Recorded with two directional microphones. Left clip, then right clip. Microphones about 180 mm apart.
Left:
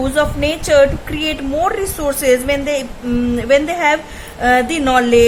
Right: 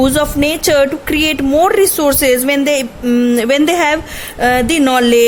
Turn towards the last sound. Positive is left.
turn(degrees=-55)  # may be behind; listen again after turning